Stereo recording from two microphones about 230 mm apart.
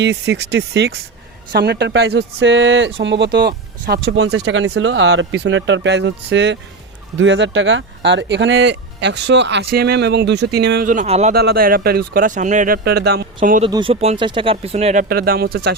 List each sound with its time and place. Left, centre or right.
0.0 s speech: right
11.3 s speech: right
13.7 s speech: right
15.1 s speech: right